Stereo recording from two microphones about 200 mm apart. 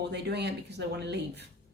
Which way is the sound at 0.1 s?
55° right (ahead or behind).